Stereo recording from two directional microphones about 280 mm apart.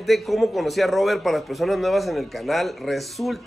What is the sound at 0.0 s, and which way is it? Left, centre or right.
A man's voice, centre.